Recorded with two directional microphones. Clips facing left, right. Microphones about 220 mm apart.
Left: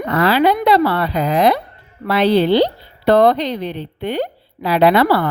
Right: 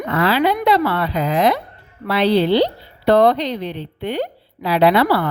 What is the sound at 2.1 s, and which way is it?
Speech, 50° left (ahead or behind).